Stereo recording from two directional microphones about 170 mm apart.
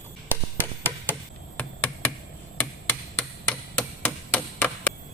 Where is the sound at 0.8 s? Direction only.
10° left (ahead or behind).